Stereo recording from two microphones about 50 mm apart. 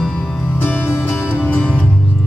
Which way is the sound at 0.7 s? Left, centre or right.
Left.